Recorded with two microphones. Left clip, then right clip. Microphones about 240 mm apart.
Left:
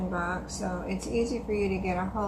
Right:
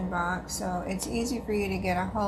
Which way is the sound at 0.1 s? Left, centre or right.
Right.